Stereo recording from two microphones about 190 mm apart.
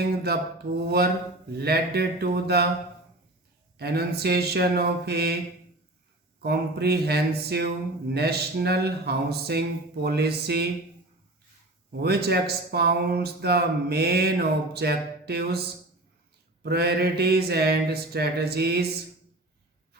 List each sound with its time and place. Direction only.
0.3 s speech: 55° right (ahead or behind)
3.8 s speech: 60° right (ahead or behind)
6.4 s speech: 55° right (ahead or behind)
11.9 s speech: 55° right (ahead or behind)
16.6 s speech: 60° right (ahead or behind)